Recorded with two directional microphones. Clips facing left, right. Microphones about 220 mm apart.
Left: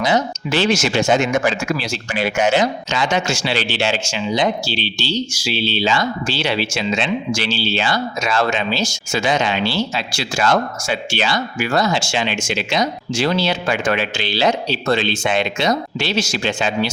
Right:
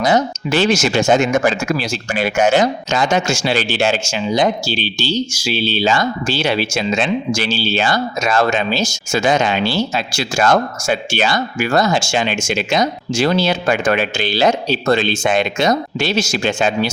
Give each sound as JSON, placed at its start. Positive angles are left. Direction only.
{"t": 0.0, "sound": "speech", "side_deg": -45}